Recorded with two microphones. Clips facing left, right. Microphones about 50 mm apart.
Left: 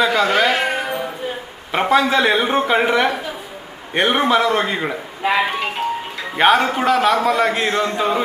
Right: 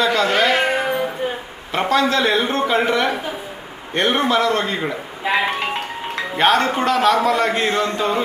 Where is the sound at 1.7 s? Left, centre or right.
Centre.